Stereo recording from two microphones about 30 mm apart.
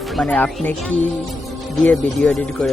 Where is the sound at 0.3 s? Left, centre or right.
Left.